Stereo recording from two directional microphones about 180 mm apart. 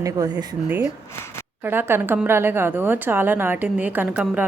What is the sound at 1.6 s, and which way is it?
A woman's voice, 10° right (ahead or behind).